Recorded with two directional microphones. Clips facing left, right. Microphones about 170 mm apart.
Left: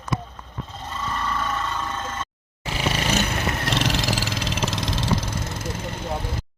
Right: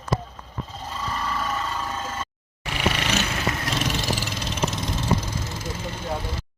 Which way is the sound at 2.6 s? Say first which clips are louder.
Left 2 dB; 25° left (ahead or behind).